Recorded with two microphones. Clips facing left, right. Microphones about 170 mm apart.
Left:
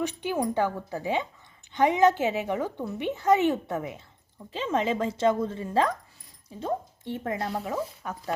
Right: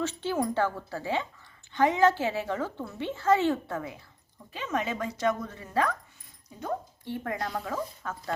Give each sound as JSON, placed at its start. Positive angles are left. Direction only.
{"t": 0.0, "sound": "a woman's voice", "side_deg": 15}
{"t": 8.0, "sound": "a woman's voice", "side_deg": 15}